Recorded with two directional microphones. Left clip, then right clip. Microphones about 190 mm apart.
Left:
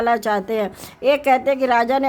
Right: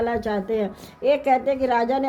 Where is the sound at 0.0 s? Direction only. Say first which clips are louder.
Left 6 dB; 45° left (ahead or behind).